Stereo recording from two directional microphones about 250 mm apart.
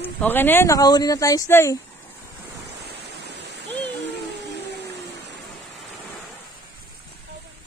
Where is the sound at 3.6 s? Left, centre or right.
Right.